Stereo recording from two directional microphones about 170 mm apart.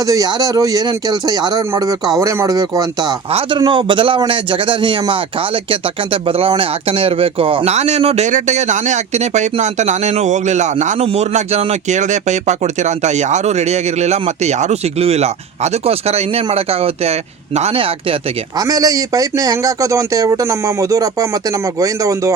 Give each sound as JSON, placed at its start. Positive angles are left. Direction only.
{"t": 0.0, "sound": "speech", "side_deg": -20}
{"t": 18.6, "sound": "speech", "side_deg": -20}